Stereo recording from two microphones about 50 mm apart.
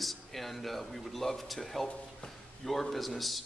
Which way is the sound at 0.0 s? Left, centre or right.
Centre.